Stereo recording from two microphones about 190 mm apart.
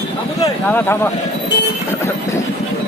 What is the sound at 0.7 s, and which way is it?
Speech, 10° left (ahead or behind).